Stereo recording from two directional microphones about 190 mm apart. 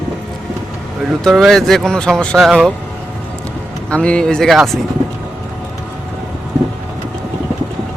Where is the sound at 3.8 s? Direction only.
5° left (ahead or behind).